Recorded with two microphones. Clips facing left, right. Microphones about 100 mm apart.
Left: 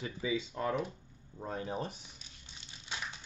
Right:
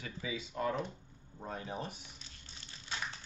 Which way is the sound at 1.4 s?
35° left (ahead or behind).